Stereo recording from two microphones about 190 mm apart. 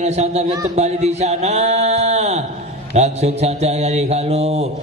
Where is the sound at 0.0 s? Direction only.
35° right (ahead or behind).